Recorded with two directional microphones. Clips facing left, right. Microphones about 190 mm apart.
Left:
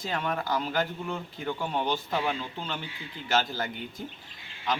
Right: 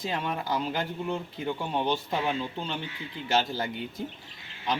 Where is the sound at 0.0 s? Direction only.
25° right (ahead or behind).